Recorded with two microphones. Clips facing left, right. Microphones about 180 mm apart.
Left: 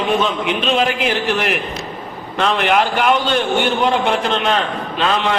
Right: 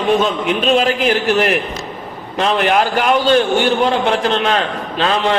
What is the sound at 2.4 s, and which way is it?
Speech, 40° right (ahead or behind).